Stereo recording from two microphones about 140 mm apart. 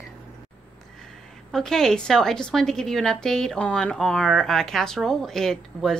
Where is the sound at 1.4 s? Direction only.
Centre (ahead or behind).